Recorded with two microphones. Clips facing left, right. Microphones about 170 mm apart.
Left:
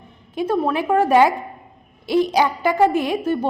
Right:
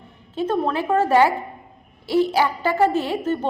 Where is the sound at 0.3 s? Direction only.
10° left (ahead or behind).